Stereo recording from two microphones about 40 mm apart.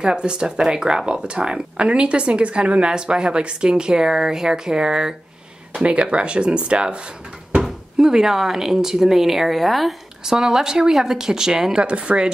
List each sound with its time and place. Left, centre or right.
0.0 s speech: centre
5.8 s speech: right
8.0 s speech: centre
10.2 s speech: centre
11.8 s speech: right